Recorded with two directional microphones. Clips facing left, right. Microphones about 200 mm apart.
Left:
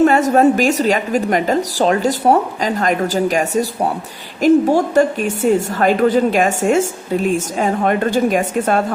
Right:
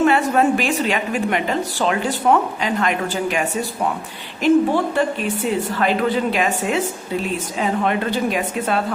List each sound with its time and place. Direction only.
0.0 s a woman's voice: 40° left (ahead or behind)